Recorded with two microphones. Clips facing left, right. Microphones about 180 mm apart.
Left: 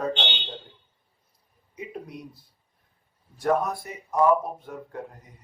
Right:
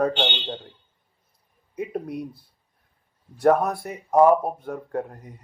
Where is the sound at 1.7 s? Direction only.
55° right (ahead or behind).